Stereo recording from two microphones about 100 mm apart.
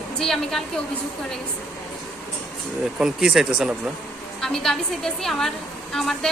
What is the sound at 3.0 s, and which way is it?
Speech, 5° right (ahead or behind).